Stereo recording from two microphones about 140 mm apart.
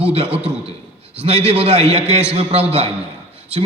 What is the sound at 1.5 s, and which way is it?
A man's voice, 45° right (ahead or behind).